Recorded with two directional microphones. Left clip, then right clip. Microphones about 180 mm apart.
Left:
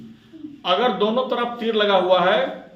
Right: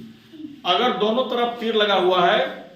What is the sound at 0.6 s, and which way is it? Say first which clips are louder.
A man's voice: even; 50° left (ahead or behind).